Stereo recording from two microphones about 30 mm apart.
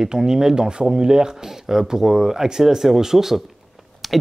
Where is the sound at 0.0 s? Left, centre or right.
Right.